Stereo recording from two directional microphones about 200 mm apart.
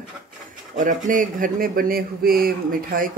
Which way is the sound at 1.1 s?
45° right (ahead or behind).